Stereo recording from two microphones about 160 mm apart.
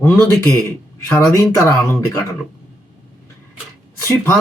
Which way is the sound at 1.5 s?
15° left (ahead or behind).